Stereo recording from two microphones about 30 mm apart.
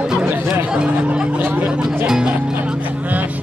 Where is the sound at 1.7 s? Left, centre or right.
Right.